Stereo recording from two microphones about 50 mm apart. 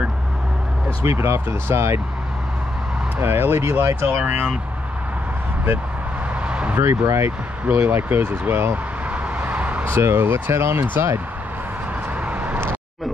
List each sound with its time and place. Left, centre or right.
1.0 s speech: right
3.2 s speech: right
4.2 s speech: right
6.4 s a sound: right
6.8 s speech: right
7.6 s speech: right
7.9 s speech: right
9.4 s a sound: right
9.9 s speech: right
10.2 s speech: right
12.3 s vehicle: right